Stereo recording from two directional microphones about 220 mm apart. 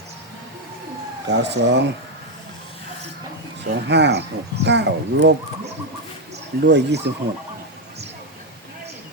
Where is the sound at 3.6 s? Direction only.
50° right (ahead or behind).